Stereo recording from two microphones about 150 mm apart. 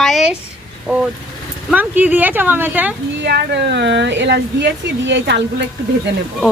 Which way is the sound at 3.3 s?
90° right.